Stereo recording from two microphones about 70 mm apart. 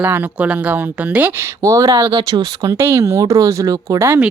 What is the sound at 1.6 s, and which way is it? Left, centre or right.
Speech, right.